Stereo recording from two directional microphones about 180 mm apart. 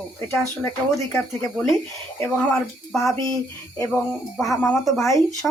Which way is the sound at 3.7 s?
15° left (ahead or behind).